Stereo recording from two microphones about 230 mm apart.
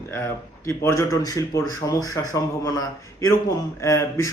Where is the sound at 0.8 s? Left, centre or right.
Centre.